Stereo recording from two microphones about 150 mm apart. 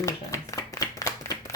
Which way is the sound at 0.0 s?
20° left (ahead or behind).